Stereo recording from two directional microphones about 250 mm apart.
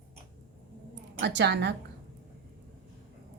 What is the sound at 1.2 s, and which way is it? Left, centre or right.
Speech, right.